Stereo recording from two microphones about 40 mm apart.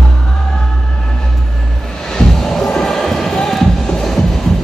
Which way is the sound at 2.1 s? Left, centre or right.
Centre.